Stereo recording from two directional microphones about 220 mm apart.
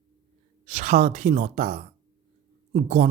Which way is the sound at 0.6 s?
35° right (ahead or behind).